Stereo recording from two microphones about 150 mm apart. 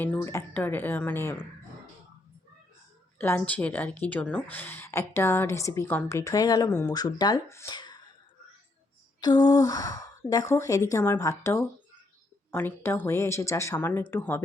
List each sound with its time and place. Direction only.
0.0 s a woman's voice: 15° left (ahead or behind)
3.2 s a woman's voice: 10° left (ahead or behind); by 8.0 s 30° left (ahead or behind)
9.2 s a woman's voice: 30° left (ahead or behind)